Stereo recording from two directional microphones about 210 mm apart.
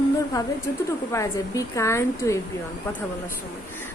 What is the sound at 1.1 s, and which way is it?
A woman's voice, 15° left (ahead or behind).